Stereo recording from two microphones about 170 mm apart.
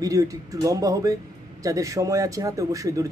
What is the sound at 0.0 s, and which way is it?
Speech, 20° right (ahead or behind).